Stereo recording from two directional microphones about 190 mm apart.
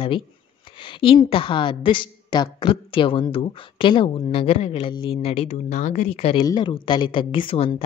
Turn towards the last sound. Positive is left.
turn(degrees=30)  # may be behind; listen again after turning